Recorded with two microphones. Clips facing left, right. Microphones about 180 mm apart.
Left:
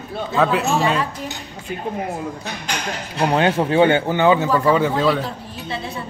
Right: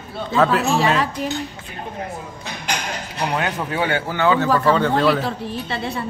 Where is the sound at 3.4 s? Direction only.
30° left (ahead or behind); by 4.9 s 10° left (ahead or behind).